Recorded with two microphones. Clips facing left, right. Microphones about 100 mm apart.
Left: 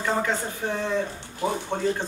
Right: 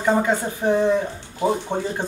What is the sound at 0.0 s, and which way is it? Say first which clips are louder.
Speech: right 6 dB; 20° right (ahead or behind).